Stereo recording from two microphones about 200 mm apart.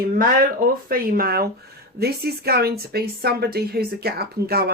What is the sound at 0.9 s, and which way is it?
Speech, 50° right (ahead or behind).